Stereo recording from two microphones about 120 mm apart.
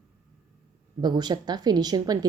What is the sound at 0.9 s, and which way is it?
Speech, 35° right (ahead or behind).